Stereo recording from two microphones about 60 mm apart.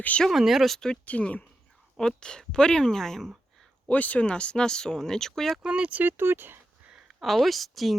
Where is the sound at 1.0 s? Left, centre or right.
Left.